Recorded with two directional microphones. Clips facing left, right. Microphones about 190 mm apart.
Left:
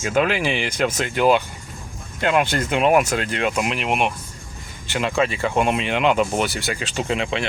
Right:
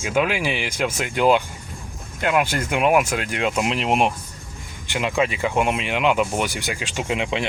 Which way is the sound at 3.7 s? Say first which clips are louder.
Right 2 dB; 30° right (ahead or behind).